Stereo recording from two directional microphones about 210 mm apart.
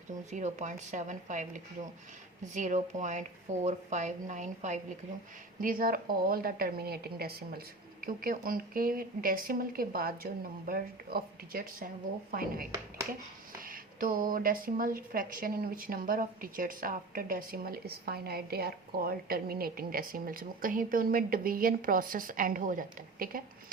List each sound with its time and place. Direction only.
0.3 s a woman's voice: 35° right (ahead or behind)